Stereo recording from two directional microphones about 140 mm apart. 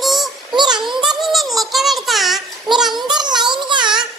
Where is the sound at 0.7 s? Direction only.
5° right (ahead or behind).